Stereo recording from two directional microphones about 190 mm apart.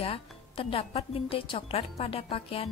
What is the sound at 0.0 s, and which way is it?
Speech, 30° left (ahead or behind).